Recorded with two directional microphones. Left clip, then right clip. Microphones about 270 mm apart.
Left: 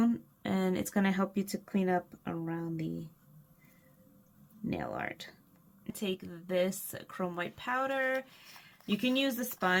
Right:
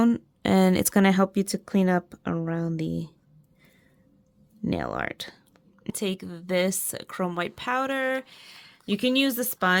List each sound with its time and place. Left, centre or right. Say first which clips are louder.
0.0 s a woman's voice: right 8 dB; right
4.6 s a woman's voice: right 8 dB; right